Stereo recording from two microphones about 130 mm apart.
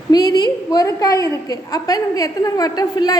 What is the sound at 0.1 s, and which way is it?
A woman's voice, 30° left (ahead or behind).